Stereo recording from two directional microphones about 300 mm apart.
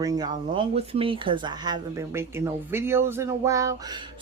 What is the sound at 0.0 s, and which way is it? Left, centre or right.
Speech, centre.